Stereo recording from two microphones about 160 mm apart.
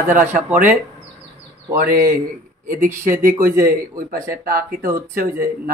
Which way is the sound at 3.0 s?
60° right (ahead or behind).